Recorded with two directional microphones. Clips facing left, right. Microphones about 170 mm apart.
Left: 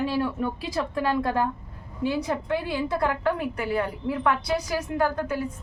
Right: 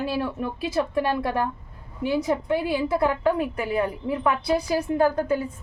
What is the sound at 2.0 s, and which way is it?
A woman's voice, 20° right (ahead or behind).